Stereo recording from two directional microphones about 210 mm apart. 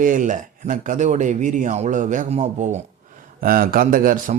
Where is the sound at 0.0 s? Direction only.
40° right (ahead or behind).